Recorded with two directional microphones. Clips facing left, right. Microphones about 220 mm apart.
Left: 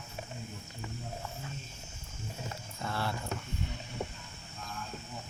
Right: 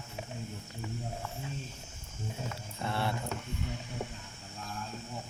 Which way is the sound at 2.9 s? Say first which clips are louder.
Right 2 dB; 25° right (ahead or behind).